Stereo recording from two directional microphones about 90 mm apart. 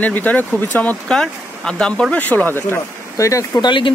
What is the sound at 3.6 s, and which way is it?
Speech, 65° left (ahead or behind).